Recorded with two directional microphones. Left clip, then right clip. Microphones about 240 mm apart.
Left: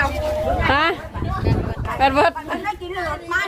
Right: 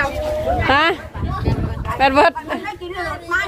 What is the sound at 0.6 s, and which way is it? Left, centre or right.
A woman's voice, right.